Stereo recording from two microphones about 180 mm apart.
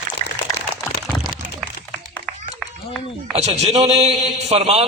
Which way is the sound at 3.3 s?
35° right (ahead or behind).